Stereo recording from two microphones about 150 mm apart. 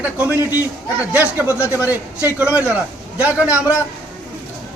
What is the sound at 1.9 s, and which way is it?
A man's voice, 10° right (ahead or behind).